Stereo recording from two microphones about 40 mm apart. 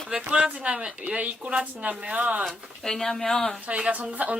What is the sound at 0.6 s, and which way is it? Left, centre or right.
Speech, right.